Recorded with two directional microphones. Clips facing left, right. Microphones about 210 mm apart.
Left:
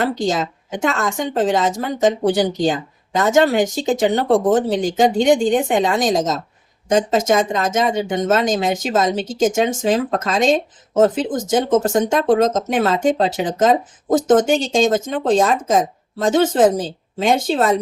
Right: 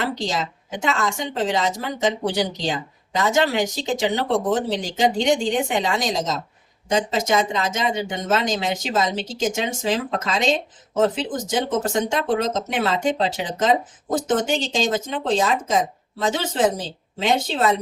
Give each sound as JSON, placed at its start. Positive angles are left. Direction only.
{"t": 0.0, "sound": "speech", "side_deg": 50}